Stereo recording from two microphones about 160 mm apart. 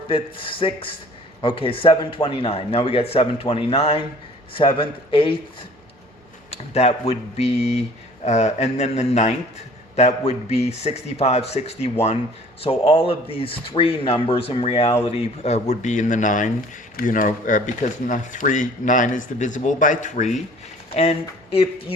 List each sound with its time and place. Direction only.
0.1 s a man's voice: 35° left (ahead or behind)
6.5 s a man's voice: 40° left (ahead or behind)